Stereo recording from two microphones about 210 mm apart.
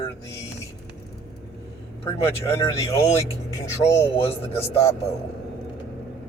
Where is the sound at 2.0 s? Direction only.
15° left (ahead or behind).